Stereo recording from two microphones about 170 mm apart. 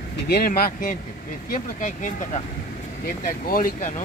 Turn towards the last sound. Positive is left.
turn(degrees=50)  # may be behind; listen again after turning